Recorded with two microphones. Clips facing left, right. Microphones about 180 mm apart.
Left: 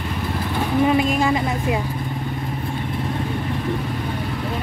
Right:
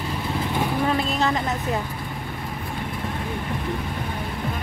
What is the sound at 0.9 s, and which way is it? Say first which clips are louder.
Speech: left 5 dB; 10° left (ahead or behind).